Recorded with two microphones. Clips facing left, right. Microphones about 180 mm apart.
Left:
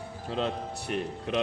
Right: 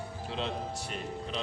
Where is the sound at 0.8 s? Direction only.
65° left (ahead or behind).